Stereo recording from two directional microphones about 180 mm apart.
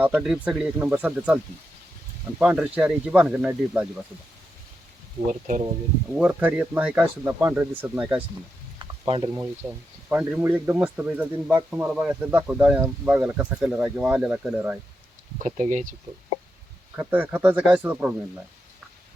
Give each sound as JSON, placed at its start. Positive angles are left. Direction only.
{"t": 0.0, "sound": "speech", "side_deg": -5}
{"t": 2.4, "sound": "speech", "side_deg": -10}
{"t": 5.3, "sound": "speech", "side_deg": -45}
{"t": 6.1, "sound": "speech", "side_deg": -10}
{"t": 8.8, "sound": "frying", "side_deg": -30}
{"t": 9.3, "sound": "speech", "side_deg": -10}
{"t": 15.4, "sound": "speech", "side_deg": -40}
{"t": 16.9, "sound": "speech", "side_deg": -10}